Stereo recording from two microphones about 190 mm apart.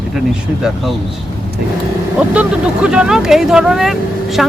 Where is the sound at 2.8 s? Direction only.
5° right (ahead or behind).